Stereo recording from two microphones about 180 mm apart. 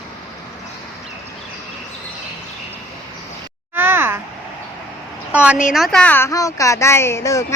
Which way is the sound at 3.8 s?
10° right (ahead or behind).